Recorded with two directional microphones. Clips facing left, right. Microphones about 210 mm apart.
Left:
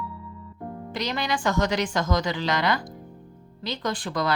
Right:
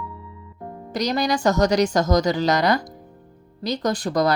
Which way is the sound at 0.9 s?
40° right (ahead or behind).